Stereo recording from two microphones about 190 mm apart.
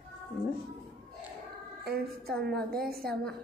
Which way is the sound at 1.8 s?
55° right (ahead or behind).